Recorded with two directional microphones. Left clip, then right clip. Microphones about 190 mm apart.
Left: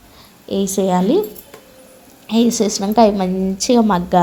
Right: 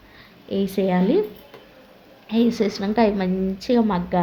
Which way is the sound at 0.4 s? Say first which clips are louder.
Left 5 dB; 20° left (ahead or behind).